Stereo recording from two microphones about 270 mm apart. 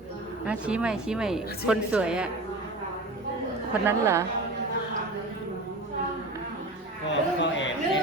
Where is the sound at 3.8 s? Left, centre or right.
Centre.